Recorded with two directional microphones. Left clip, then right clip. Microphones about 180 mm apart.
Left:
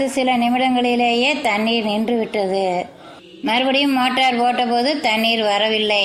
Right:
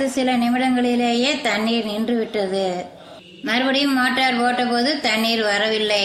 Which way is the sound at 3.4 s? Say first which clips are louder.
Left 2 dB; 15° left (ahead or behind).